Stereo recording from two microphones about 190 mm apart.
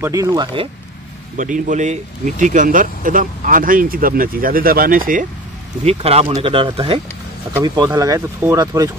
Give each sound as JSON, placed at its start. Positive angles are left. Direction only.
{"t": 0.0, "sound": "speech", "side_deg": -15}
{"t": 1.3, "sound": "speech", "side_deg": -40}
{"t": 5.9, "sound": "speech", "side_deg": -30}